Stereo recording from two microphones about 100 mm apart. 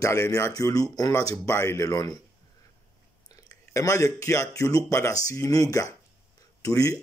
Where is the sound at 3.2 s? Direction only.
40° left (ahead or behind).